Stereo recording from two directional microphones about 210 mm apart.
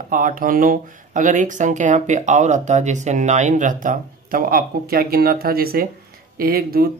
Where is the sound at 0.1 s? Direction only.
40° right (ahead or behind).